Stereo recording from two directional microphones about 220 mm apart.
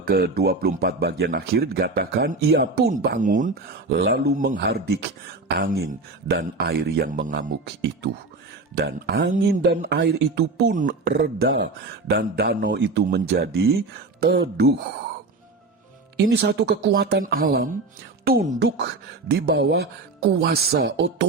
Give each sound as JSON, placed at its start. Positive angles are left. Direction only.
{"t": 0.0, "sound": "speech", "side_deg": -45}
{"t": 16.1, "sound": "speech", "side_deg": -45}